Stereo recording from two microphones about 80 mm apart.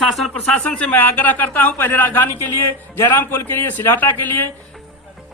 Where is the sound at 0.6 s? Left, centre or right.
Centre.